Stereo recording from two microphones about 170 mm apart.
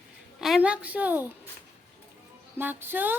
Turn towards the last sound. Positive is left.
turn(degrees=-10)  # may be behind; listen again after turning